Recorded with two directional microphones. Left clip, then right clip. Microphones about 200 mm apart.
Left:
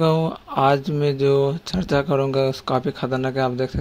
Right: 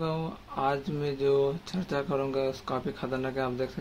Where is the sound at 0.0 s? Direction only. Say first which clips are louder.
Left 13 dB; 45° left (ahead or behind).